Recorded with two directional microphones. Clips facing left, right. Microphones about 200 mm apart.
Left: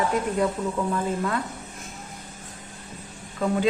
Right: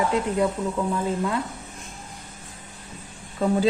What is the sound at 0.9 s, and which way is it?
Speech, 10° right (ahead or behind).